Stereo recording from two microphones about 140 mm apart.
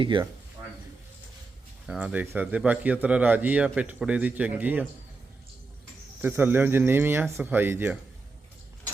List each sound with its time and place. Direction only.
0.0 s speech: 35° right (ahead or behind)
1.9 s a man's voice: 10° right (ahead or behind)
6.2 s a man's voice: 15° right (ahead or behind)